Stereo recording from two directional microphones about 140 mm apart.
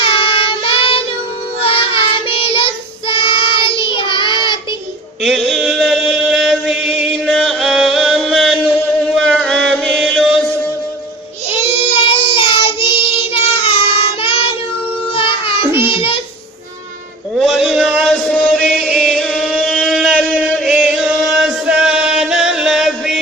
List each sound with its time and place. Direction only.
0.0 s child singing: 40° left (ahead or behind)
5.2 s chant: centre (ahead or behind)
9.1 s music: 5° left (ahead or behind)
11.6 s child singing: 45° left (ahead or behind)
17.3 s chant: centre (ahead or behind)
19.6 s a sound: centre (ahead or behind)
20.5 s chant: centre (ahead or behind)